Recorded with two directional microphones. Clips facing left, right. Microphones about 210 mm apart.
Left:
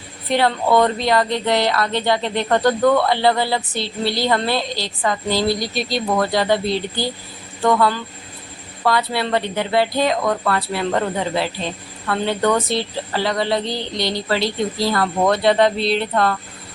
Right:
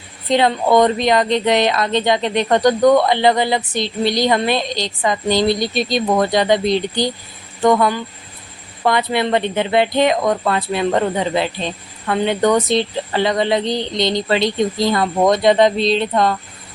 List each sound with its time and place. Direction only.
0.3 s speech: 20° right (ahead or behind)